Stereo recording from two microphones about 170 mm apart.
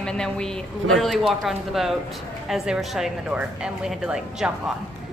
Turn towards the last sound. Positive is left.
turn(degrees=-5)  # may be behind; listen again after turning